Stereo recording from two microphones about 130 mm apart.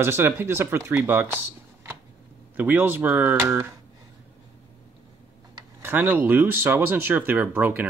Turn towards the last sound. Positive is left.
turn(degrees=-15)  # may be behind; listen again after turning